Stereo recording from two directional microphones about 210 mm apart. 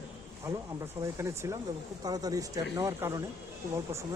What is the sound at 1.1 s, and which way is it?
Speech, 15° right (ahead or behind).